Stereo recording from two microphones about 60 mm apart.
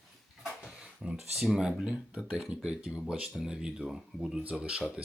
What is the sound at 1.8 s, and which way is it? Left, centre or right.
Speech, right.